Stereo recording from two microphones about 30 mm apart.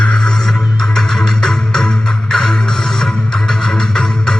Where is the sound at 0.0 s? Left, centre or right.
Left.